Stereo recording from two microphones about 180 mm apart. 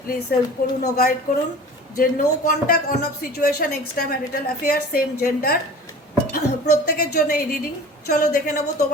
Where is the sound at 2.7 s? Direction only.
55° left (ahead or behind).